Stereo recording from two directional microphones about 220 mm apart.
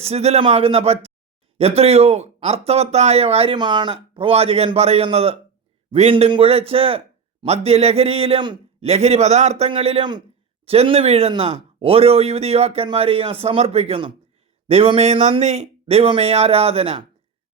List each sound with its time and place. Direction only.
0.0 s speech: 30° right (ahead or behind)